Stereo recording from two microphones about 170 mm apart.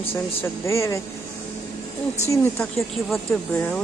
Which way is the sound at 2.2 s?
15° left (ahead or behind).